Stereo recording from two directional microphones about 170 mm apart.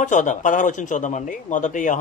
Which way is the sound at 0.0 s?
45° left (ahead or behind).